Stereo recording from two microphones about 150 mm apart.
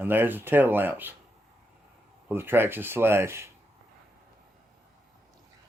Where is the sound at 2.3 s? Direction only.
15° right (ahead or behind).